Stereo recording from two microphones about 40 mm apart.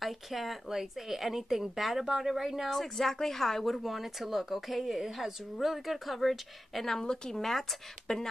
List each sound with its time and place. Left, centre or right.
0.0 s speech: centre
2.7 s speech: centre
8.1 s speech: centre